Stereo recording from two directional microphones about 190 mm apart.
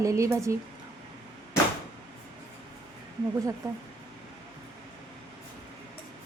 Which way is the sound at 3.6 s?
20° right (ahead or behind).